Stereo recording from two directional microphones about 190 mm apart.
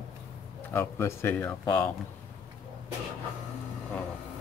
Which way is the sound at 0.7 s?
10° left (ahead or behind).